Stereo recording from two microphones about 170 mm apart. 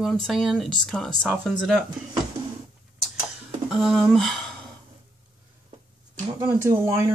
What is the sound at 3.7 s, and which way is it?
Speech, centre (ahead or behind).